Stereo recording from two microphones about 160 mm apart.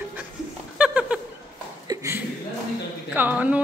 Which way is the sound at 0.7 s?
5° right (ahead or behind).